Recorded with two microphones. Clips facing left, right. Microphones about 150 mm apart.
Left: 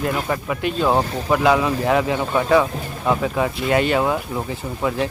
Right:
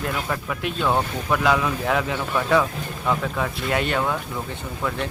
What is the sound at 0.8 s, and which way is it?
Speech, 35° left (ahead or behind).